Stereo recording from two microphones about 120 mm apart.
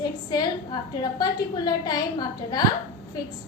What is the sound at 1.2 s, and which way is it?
A woman's voice, 35° left (ahead or behind).